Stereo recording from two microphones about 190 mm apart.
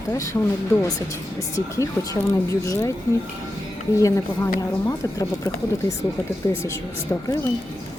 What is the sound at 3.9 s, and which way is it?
Speech, 15° left (ahead or behind).